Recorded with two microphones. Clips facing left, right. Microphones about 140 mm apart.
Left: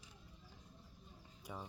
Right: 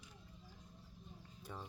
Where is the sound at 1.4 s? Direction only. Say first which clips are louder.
Left 1 dB; 10° left (ahead or behind).